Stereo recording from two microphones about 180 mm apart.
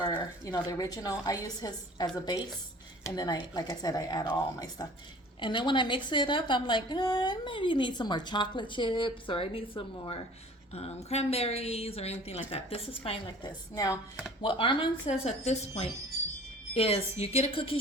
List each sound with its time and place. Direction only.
0.0 s a woman's voice: 25° left (ahead or behind)